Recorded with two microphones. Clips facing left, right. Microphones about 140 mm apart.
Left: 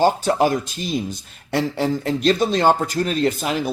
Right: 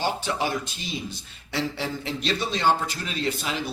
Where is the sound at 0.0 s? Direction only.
45° left (ahead or behind).